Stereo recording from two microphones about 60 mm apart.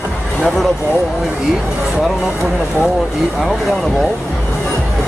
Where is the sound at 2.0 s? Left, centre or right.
Centre.